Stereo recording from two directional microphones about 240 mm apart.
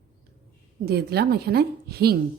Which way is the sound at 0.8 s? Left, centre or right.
Right.